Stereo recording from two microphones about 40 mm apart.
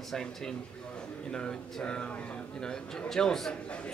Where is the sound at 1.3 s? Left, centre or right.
Left.